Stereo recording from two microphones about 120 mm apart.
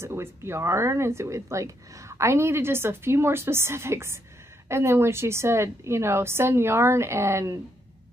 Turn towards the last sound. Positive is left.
turn(degrees=-25)  # may be behind; listen again after turning